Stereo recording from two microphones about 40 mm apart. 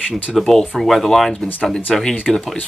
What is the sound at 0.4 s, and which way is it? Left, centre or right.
Speech, centre.